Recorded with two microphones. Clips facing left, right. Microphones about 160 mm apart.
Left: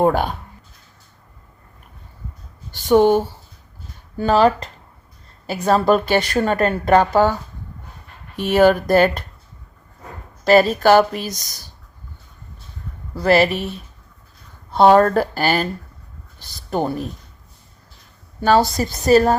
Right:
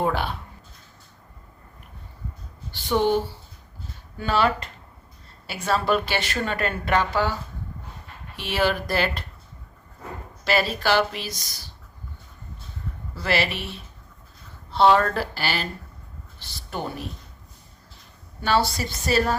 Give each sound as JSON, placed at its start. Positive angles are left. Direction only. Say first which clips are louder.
{"t": 0.0, "sound": "a woman's voice", "louder": "left 8 dB", "side_deg": 45}
{"t": 2.7, "sound": "a woman's voice", "louder": "left 8 dB", "side_deg": 45}
{"t": 8.4, "sound": "a woman's voice", "louder": "left 10 dB", "side_deg": 45}
{"t": 10.4, "sound": "a woman's voice", "louder": "left 10 dB", "side_deg": 45}
{"t": 13.1, "sound": "a woman's voice", "louder": "left 10 dB", "side_deg": 45}
{"t": 18.4, "sound": "a woman's voice", "louder": "left 7 dB", "side_deg": 45}